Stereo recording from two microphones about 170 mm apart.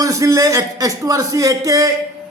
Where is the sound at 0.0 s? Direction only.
20° right (ahead or behind).